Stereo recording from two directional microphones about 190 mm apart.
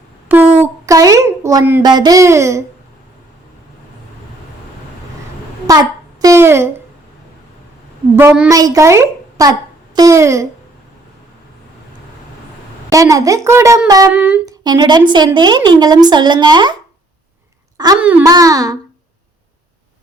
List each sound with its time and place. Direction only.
0.6 s a sound: 15° right (ahead or behind)
1.8 s a woman's voice: 20° right (ahead or behind)
5.7 s a sound: 20° right (ahead or behind)
6.2 s a woman's voice: 15° right (ahead or behind)
8.1 s a woman's voice: 10° right (ahead or behind)
12.9 s a woman's voice: 20° right (ahead or behind)
14.1 s a woman's voice: 5° right (ahead or behind)
14.4 s speech: 20° right (ahead or behind)
18.0 s a woman's voice: 10° right (ahead or behind)
18.3 s speech: 20° right (ahead or behind)